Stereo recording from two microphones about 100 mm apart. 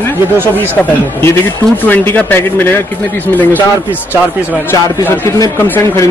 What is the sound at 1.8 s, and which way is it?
Speech, 15° left (ahead or behind).